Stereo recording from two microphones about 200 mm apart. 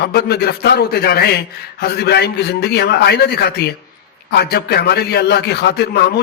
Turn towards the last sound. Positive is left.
turn(degrees=55)  # may be behind; listen again after turning